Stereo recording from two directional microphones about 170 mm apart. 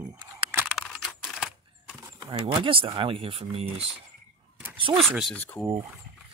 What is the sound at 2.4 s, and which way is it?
Speech, 30° right (ahead or behind).